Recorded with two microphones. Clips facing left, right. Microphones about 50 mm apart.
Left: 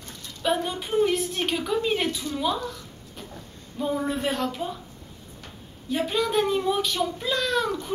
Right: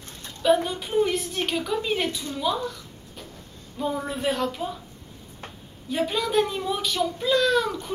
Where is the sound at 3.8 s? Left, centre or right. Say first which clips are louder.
Left 1 dB; centre.